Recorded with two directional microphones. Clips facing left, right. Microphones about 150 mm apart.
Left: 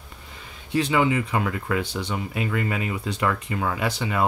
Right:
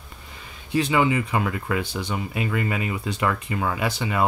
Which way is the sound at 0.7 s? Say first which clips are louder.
Even; 10° right (ahead or behind).